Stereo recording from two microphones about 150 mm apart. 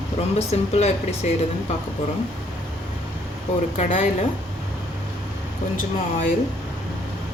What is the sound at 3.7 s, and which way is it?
Speech, 55° left (ahead or behind).